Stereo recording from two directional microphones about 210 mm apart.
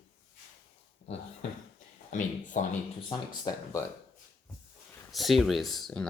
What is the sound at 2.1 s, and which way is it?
Speech, 35° left (ahead or behind).